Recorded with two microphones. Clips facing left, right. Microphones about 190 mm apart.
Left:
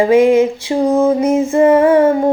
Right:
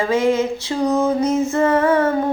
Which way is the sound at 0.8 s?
30° left (ahead or behind).